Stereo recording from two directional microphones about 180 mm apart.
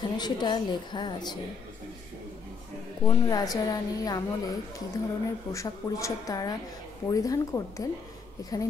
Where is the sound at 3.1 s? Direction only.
20° left (ahead or behind).